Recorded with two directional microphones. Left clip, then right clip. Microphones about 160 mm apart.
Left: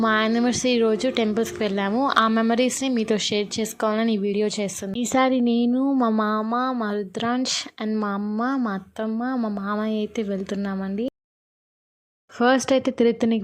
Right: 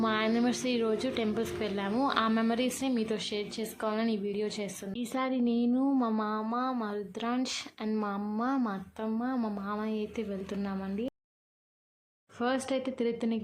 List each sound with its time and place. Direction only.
0.0 s a woman's voice: 40° left (ahead or behind)
12.4 s speech: 40° left (ahead or behind)